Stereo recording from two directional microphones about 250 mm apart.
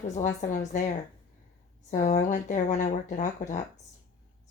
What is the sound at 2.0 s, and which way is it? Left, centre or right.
Speech, left.